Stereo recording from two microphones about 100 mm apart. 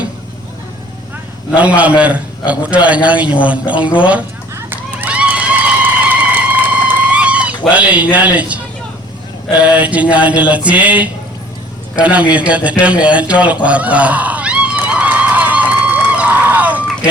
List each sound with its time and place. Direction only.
1.5 s mantra: 15° right (ahead or behind)
4.5 s run: 20° right (ahead or behind)
7.7 s mantra: 15° right (ahead or behind)
11.9 s a sound: 15° right (ahead or behind)